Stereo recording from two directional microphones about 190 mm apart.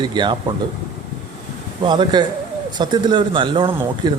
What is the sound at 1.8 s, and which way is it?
Speech, 25° right (ahead or behind).